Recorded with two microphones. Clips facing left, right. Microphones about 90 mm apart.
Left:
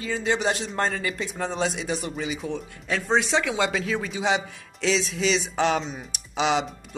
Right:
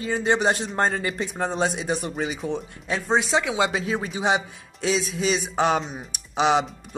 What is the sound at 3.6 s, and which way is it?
Speech, 30° right (ahead or behind).